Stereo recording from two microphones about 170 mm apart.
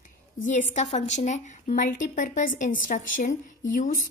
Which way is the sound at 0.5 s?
45° left (ahead or behind).